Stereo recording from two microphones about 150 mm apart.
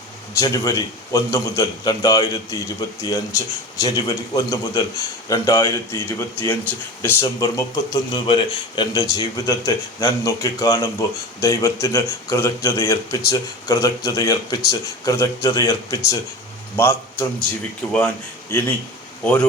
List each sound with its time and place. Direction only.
0.3 s a man's voice: 25° left (ahead or behind)
7.4 s a man's voice: 25° left (ahead or behind)
19.2 s speech: 10° left (ahead or behind)